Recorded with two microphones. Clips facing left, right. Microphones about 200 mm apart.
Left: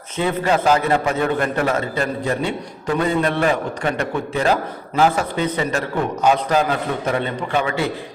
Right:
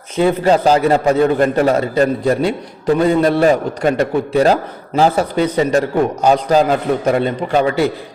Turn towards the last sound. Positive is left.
turn(degrees=-40)  # may be behind; listen again after turning